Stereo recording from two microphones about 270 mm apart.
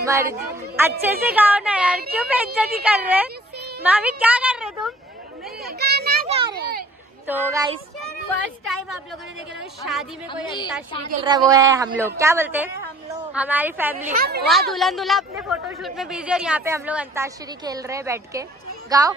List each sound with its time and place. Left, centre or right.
0.0 s a woman's voice: centre
5.7 s children playing: right
6.5 s a sound: right
7.2 s a woman's voice: centre
8.6 s speech: centre
10.4 s a woman's voice: centre
11.2 s a woman's voice: centre
14.1 s speech: right
14.5 s a woman's voice: centre